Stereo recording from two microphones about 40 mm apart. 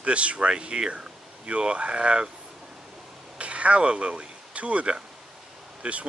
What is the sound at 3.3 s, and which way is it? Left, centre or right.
Speech, right.